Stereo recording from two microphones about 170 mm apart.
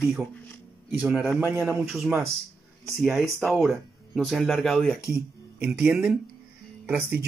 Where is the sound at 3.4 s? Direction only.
Centre (ahead or behind).